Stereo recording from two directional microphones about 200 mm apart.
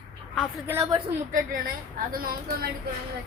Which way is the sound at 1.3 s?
45° right (ahead or behind).